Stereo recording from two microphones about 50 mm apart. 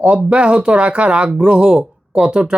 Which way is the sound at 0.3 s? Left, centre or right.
Right.